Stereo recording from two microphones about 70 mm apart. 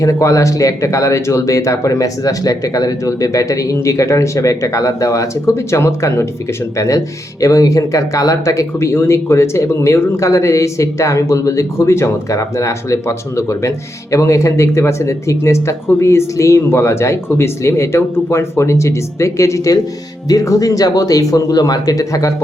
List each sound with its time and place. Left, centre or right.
0.0 s speech: left
8.9 s speech: left